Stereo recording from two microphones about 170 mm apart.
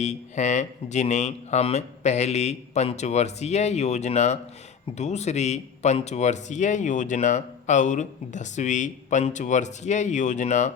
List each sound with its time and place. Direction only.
0.0 s speech: 45° left (ahead or behind)